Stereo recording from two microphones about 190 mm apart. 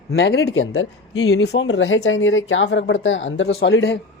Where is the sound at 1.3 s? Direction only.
70° left (ahead or behind).